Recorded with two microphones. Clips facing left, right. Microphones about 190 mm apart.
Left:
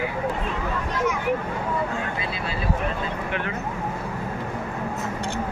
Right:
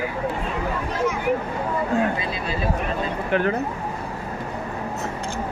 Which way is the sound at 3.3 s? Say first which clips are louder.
Right 8 dB; 40° right (ahead or behind).